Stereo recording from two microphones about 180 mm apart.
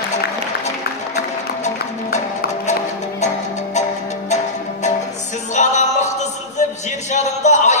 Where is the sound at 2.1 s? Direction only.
40° left (ahead or behind).